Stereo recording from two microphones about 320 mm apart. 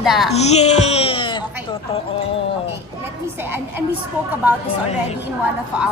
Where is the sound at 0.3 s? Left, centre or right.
Centre.